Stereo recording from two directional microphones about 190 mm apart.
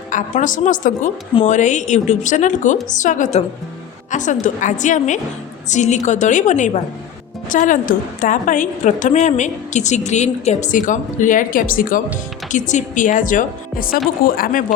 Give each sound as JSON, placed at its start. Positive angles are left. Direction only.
{"t": 0.1, "sound": "a woman's voice", "side_deg": 40}